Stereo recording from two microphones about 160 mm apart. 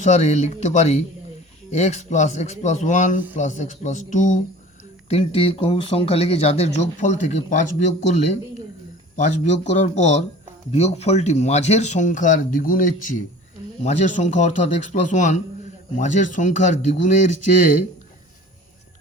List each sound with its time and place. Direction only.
0.0 s speech: 45° left (ahead or behind)
5.0 s speech: 40° left (ahead or behind); by 17.7 s 55° left (ahead or behind)